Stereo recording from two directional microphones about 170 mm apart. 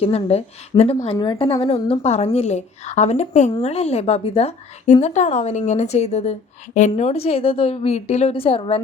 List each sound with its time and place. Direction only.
0.0 s a woman's voice: 35° left (ahead or behind)